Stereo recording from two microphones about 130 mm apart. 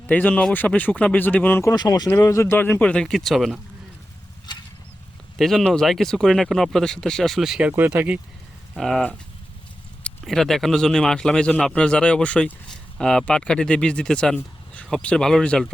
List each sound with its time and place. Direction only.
0.1 s speech: 10° left (ahead or behind)
1.7 s speech: 30° left (ahead or behind)
2.0 s speech: 20° left (ahead or behind); by 3.6 s centre (ahead or behind)
5.4 s speech: 5° left (ahead or behind)
7.7 s speech: 15° right (ahead or behind)
8.7 s speech: centre (ahead or behind)